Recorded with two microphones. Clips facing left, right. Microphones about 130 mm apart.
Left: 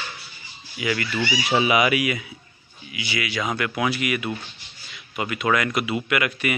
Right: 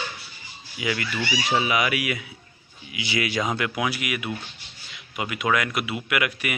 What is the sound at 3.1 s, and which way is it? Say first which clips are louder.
Speech: right 2 dB; 35° right (ahead or behind).